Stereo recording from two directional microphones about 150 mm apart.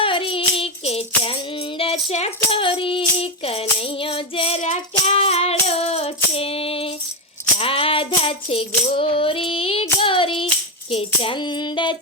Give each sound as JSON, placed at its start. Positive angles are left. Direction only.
{"t": 0.0, "sound": "child singing", "side_deg": 35}
{"t": 1.8, "sound": "a sound", "side_deg": 40}
{"t": 7.6, "sound": "music", "side_deg": 40}
{"t": 10.9, "sound": "child singing", "side_deg": 35}